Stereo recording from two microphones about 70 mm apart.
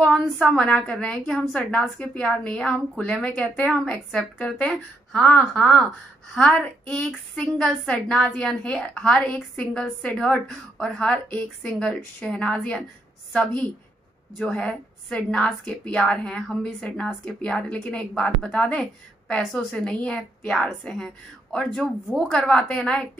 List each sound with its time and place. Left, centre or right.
0.4 s a woman's voice: centre
1.5 s a woman's voice: centre
6.3 s a woman's voice: centre
14.4 s a woman's voice: centre